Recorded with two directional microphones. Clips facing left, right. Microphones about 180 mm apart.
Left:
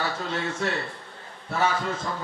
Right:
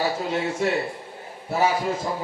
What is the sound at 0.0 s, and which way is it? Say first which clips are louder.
A man's voice: right 5 dB; 20° right (ahead or behind).